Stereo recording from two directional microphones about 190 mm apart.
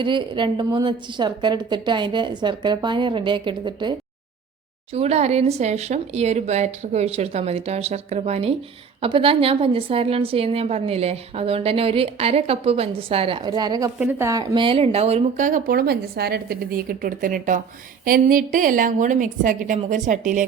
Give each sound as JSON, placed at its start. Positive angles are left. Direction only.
{"t": 0.0, "sound": "a woman's voice", "side_deg": -25}
{"t": 4.9, "sound": "a woman's voice", "side_deg": -35}